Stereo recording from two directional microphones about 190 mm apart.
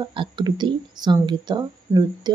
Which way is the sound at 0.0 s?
25° right (ahead or behind).